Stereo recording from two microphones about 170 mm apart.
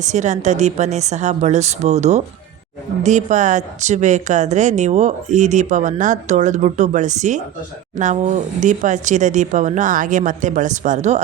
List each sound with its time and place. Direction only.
0.0 s a woman's voice: 45° right (ahead or behind)